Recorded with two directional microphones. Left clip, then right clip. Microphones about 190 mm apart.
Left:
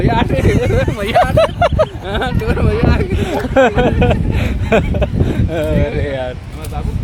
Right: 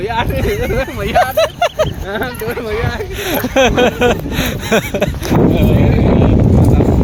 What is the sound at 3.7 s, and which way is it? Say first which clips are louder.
Speech: right 3 dB; 25° right (ahead or behind).